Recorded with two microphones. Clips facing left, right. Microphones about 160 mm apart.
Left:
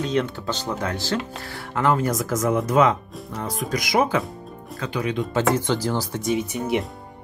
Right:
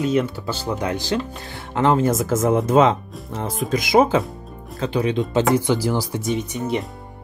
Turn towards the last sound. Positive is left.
turn(degrees=5)  # may be behind; listen again after turning